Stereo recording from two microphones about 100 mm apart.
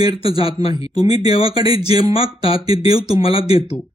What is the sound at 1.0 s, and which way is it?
Speech, 40° right (ahead or behind).